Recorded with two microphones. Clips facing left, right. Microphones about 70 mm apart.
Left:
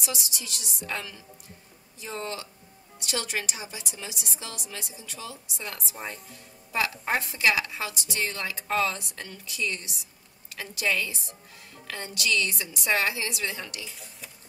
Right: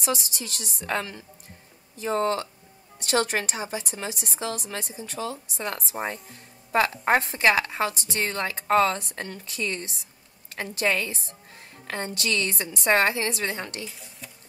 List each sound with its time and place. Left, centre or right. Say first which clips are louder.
0.0 s a woman's voice: right 7 dB; right
13.8 s speech: right 2 dB; centre